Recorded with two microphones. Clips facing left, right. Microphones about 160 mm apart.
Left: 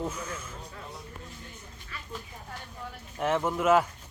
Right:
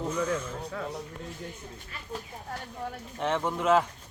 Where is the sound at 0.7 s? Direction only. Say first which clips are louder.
Right 11 dB; 75° right (ahead or behind).